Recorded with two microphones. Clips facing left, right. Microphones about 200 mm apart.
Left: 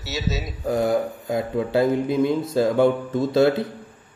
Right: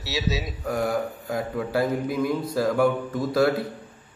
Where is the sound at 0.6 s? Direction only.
25° left (ahead or behind).